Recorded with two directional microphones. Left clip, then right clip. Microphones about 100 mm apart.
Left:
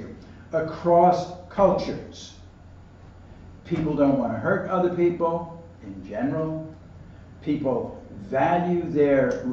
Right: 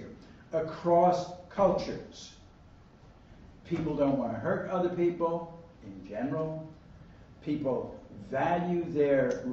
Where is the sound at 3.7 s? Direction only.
20° right (ahead or behind).